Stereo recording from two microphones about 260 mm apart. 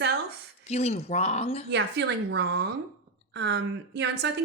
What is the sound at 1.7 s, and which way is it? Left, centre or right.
A woman's voice, right.